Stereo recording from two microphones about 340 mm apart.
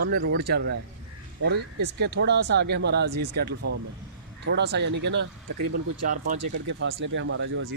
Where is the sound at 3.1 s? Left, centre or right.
Right.